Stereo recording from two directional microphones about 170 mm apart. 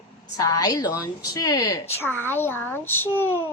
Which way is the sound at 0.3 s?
20° left (ahead or behind).